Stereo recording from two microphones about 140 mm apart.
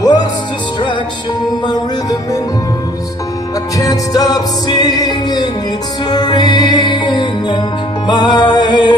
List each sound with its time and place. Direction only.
0.0 s music: 30° left (ahead or behind)
1.7 s music: 25° left (ahead or behind)
3.7 s music: 25° left (ahead or behind)